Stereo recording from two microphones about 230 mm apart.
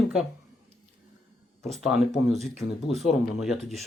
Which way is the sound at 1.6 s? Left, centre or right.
Centre.